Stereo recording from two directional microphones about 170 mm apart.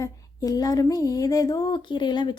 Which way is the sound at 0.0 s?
20° left (ahead or behind).